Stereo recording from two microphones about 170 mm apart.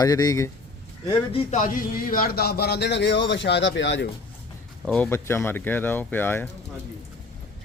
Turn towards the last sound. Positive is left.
turn(degrees=10)  # may be behind; listen again after turning